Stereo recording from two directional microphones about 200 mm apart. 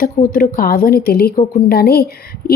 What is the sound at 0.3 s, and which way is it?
A woman's voice, 45° left (ahead or behind).